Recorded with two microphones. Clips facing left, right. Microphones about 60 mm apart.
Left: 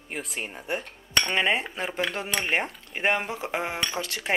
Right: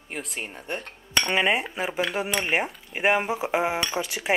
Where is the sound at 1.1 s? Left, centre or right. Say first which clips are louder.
Right 1 dB; centre.